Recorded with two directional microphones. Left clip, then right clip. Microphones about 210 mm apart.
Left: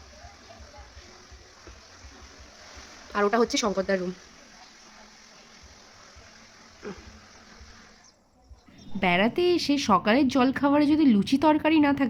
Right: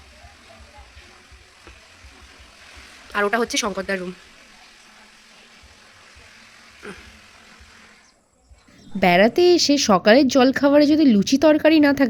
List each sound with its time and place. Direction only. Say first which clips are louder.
3.1 s speech: right 3 dB; 5° left (ahead or behind)
6.8 s a sound: right 2 dB; centre (ahead or behind)
9.0 s a woman's voice: right 8 dB; 15° right (ahead or behind)